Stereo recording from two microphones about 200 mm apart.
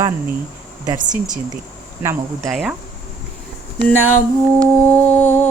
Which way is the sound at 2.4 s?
Centre (ahead or behind).